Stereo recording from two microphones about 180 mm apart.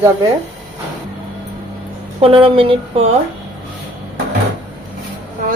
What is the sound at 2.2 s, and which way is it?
Speech, 30° right (ahead or behind).